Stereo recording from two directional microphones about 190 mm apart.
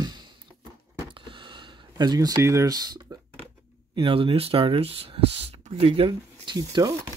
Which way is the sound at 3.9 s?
25° right (ahead or behind).